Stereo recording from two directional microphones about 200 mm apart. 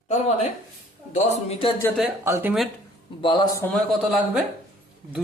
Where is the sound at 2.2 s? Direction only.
15° right (ahead or behind).